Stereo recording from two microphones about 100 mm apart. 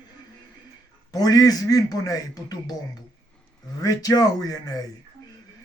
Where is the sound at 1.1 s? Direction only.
40° left (ahead or behind).